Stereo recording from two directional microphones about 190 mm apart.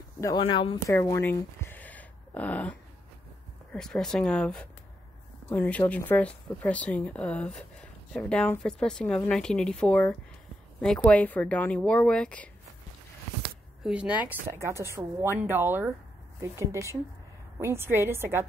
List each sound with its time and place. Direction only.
0.2 s speech: 25° left (ahead or behind)
0.9 s a sound: 15° left (ahead or behind)
3.7 s speech: 5° left (ahead or behind)
13.8 s speech: 5° right (ahead or behind)
17.6 s speech: 15° right (ahead or behind)